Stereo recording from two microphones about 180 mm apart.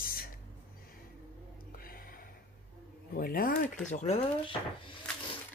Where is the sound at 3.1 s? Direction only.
50° left (ahead or behind).